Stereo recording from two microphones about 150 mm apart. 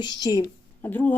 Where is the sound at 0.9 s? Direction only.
10° left (ahead or behind).